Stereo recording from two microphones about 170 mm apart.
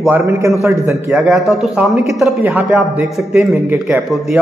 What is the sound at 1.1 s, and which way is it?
Speech, centre (ahead or behind).